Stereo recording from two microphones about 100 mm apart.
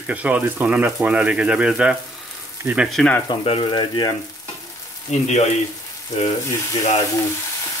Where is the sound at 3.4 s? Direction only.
60° left (ahead or behind).